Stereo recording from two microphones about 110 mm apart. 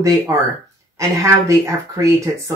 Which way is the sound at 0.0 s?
30° right (ahead or behind).